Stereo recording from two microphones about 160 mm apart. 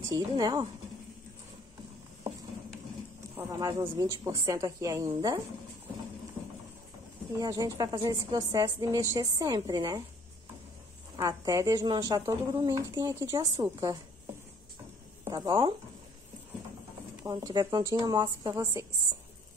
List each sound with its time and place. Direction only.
0.1 s a woman's voice: 25° right (ahead or behind)
3.3 s a woman's voice: 20° right (ahead or behind)
7.3 s a woman's voice: 20° right (ahead or behind)
11.1 s a woman's voice: 20° right (ahead or behind)
15.2 s speech: 25° right (ahead or behind)
17.2 s a woman's voice: 25° right (ahead or behind)